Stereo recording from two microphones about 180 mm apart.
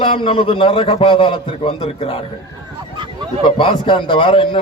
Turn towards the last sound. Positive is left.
turn(degrees=30)  # may be behind; listen again after turning